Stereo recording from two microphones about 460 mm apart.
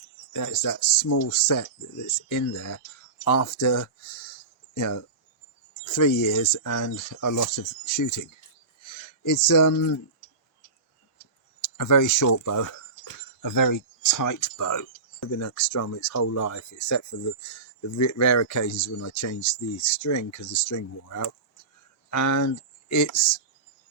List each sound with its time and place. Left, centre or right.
0.3 s speech: left
11.6 s speech: left